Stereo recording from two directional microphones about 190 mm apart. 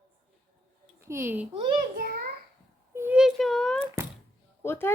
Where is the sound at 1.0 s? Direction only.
15° right (ahead or behind).